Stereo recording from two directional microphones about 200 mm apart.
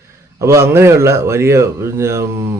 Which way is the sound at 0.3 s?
15° right (ahead or behind).